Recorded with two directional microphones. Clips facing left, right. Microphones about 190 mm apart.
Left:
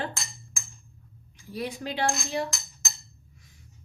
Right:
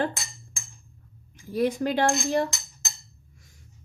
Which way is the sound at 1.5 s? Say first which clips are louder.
Right 8 dB; 50° right (ahead or behind).